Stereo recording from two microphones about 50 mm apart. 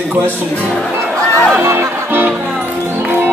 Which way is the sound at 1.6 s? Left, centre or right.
Right.